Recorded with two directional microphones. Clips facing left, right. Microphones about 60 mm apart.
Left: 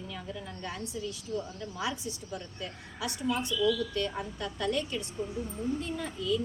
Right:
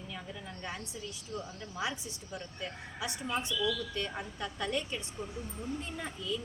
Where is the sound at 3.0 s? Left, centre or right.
Right.